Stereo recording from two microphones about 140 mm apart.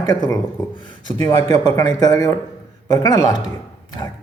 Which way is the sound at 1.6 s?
30° left (ahead or behind).